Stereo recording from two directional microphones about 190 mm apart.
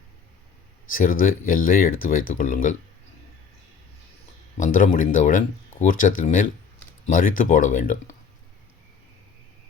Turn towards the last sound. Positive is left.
turn(degrees=45)  # may be behind; listen again after turning